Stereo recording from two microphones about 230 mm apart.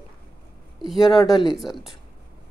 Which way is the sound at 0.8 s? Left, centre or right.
Centre.